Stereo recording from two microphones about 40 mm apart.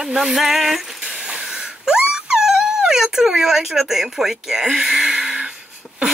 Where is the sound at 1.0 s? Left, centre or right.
Right.